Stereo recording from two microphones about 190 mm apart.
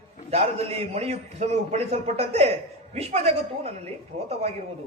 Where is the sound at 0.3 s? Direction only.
35° right (ahead or behind).